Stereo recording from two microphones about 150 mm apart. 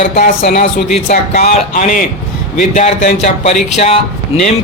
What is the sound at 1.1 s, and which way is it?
Speech, 55° left (ahead or behind).